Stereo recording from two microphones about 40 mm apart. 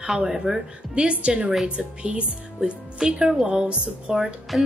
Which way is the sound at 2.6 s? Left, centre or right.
Centre.